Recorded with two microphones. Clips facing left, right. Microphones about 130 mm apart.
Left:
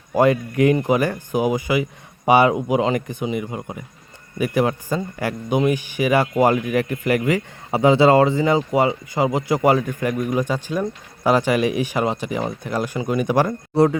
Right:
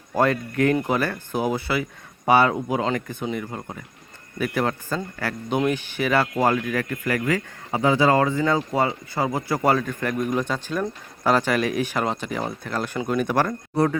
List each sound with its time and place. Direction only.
0.1 s speech: 10° left (ahead or behind)